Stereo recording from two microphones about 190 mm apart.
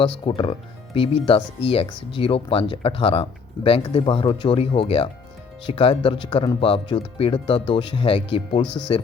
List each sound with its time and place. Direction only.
0.0 s speech: 25° left (ahead or behind)